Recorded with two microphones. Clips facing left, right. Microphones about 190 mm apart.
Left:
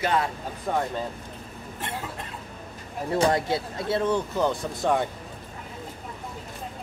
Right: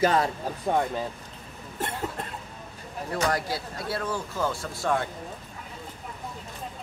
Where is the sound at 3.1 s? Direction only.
25° left (ahead or behind).